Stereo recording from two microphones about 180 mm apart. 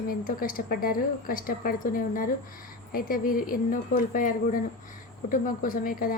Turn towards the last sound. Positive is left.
turn(degrees=50)  # may be behind; listen again after turning